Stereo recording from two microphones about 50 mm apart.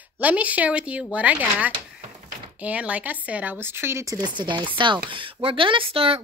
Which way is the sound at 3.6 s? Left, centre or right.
Right.